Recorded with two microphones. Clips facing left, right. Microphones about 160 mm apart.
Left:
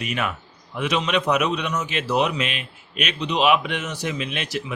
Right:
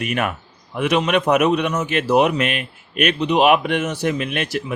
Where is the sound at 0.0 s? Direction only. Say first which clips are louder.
Right 4 dB; 55° right (ahead or behind).